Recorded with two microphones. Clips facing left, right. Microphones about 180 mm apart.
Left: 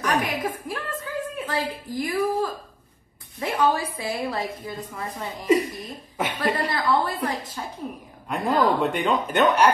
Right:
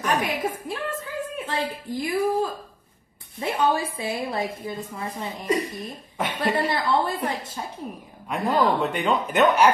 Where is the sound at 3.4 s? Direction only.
25° right (ahead or behind).